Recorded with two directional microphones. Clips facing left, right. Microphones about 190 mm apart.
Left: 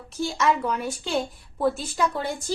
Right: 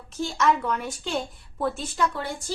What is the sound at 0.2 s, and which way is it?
A woman's voice, 5° left (ahead or behind).